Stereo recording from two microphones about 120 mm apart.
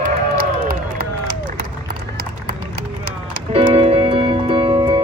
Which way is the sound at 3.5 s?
55° right (ahead or behind).